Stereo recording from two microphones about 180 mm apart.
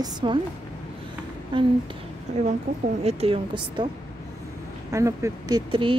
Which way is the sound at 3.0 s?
35° right (ahead or behind).